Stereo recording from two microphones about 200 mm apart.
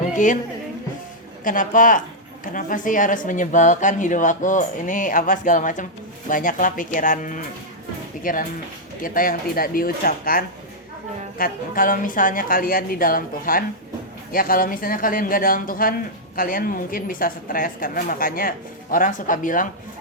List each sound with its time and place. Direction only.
0.1 s music: 40° left (ahead or behind)
1.5 s speech: 40° left (ahead or behind)